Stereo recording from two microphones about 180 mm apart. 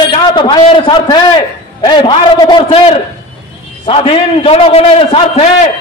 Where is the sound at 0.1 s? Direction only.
25° left (ahead or behind).